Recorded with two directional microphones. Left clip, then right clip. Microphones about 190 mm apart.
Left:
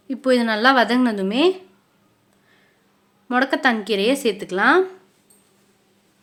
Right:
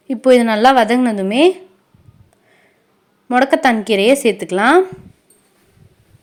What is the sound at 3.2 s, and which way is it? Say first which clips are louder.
Speech: right 6 dB; 20° right (ahead or behind).